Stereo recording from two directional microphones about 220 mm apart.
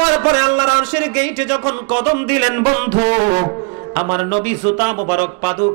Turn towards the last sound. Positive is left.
turn(degrees=-15)  # may be behind; listen again after turning